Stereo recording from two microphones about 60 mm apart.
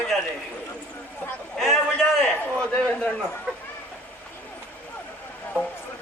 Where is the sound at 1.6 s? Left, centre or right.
Centre.